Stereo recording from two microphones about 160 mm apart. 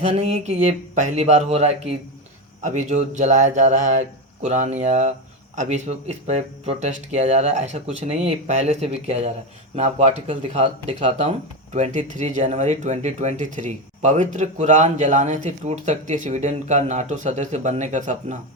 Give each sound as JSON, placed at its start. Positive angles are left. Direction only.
{"t": 0.1, "sound": "speech", "side_deg": -40}